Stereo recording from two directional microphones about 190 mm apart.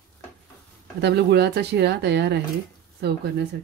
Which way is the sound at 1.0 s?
60° right (ahead or behind).